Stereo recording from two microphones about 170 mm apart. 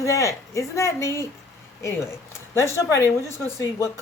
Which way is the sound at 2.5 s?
15° left (ahead or behind).